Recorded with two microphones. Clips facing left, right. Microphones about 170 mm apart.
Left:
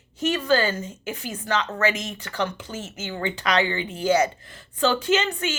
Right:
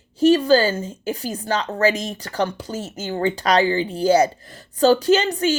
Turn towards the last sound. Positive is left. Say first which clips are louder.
# right 6 dB
turn(degrees=-35)  # may be behind; listen again after turning